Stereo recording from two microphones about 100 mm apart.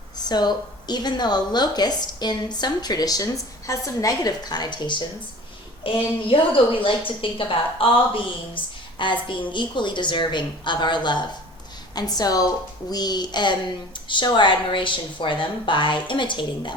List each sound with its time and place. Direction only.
0.3 s a woman's voice: 45° left (ahead or behind)
5.8 s a woman's voice: 60° left (ahead or behind)